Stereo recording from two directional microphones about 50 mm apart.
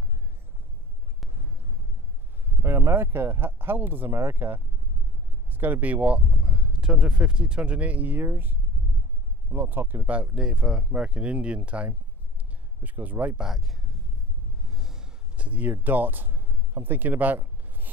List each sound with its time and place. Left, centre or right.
2.6 s speech: right
5.5 s speech: right
8.2 s speech: right
10.0 s speech: right
10.3 s speech: centre; by 13.4 s right
13.4 s speech: centre
14.7 s a sound: centre
15.3 s speech: right